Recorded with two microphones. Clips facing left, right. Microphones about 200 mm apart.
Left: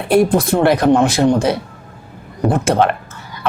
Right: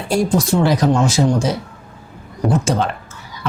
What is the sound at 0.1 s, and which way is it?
Speech, 55° left (ahead or behind).